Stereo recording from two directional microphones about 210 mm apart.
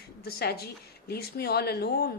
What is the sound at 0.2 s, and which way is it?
A woman's voice, 45° left (ahead or behind).